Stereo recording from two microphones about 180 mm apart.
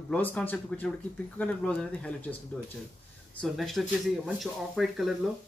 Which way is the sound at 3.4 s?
Centre (ahead or behind).